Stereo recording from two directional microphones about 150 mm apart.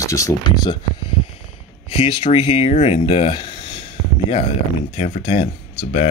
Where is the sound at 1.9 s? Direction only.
40° left (ahead or behind).